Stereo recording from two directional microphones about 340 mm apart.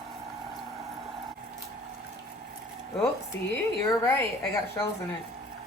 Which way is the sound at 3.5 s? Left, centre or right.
Centre.